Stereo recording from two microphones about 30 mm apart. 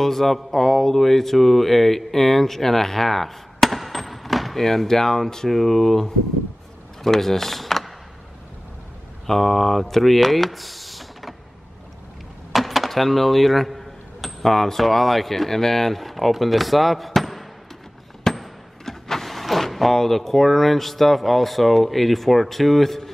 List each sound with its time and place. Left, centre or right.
0.0 s speech: centre
9.2 s speech: centre
12.5 s speech: centre
18.3 s a sound: centre
18.9 s speech: centre